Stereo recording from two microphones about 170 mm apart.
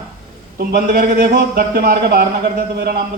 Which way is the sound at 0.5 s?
60° right (ahead or behind).